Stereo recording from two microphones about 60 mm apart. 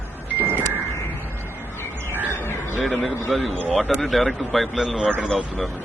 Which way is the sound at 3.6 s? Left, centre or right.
Centre.